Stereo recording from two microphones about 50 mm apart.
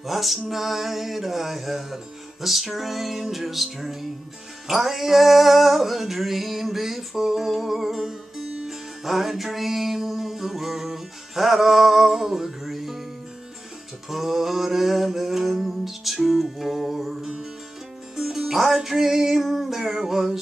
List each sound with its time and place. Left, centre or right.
0.0 s male singing: centre
8.6 s music: centre
14.0 s a sound: centre
18.1 s music: centre